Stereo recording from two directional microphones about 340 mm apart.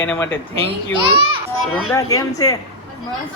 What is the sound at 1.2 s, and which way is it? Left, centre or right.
Children playing, centre.